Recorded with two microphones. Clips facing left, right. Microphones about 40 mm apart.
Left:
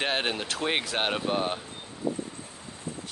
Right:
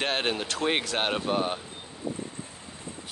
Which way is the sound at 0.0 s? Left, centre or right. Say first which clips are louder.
Even; centre.